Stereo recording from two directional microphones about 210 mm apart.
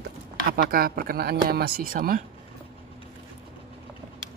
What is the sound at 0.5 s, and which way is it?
Speech, 45° right (ahead or behind).